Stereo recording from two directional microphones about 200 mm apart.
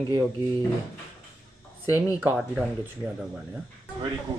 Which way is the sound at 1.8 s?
10° right (ahead or behind).